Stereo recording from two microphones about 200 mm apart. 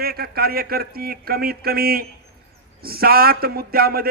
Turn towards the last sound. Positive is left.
turn(degrees=-50)  # may be behind; listen again after turning